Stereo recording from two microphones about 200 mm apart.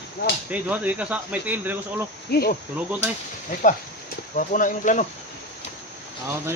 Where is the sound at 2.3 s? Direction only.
50° left (ahead or behind).